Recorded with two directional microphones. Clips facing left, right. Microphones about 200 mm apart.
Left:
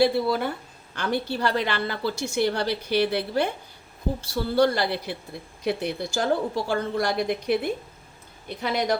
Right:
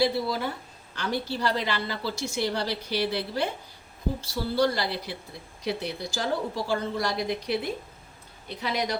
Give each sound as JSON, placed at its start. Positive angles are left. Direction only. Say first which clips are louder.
{"t": 0.0, "sound": "a woman's voice", "louder": "left 4 dB", "side_deg": 55}
{"t": 4.5, "sound": "a woman's voice", "louder": "left 4 dB", "side_deg": 55}